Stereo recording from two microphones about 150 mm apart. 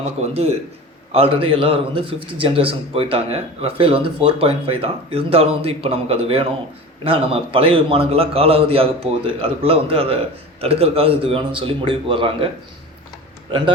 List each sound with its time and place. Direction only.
0.2 s a man's voice: 45° right (ahead or behind)